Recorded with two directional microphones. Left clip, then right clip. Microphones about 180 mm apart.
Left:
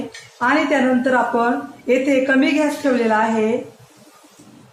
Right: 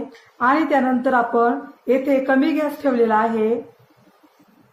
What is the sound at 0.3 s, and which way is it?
A woman's voice, 55° right (ahead or behind).